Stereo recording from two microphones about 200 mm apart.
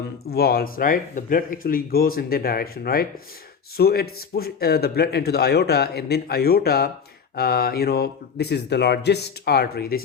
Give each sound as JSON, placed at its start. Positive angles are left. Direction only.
{"t": 0.3, "sound": "speech", "side_deg": 50}